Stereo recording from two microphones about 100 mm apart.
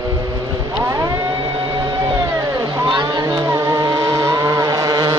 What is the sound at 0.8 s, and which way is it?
Vehicle, 35° right (ahead or behind).